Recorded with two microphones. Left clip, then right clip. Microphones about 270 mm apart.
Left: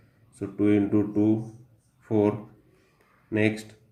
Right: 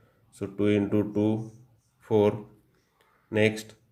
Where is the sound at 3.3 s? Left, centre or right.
Right.